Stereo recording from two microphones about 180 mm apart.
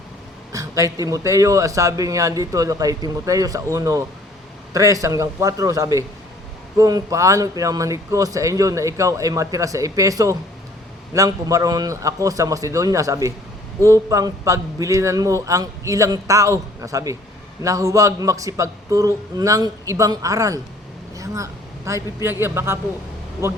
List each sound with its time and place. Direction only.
0.5 s a man's voice: 20° right (ahead or behind)